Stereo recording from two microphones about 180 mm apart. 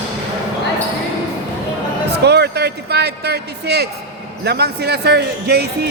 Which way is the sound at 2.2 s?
70° right (ahead or behind).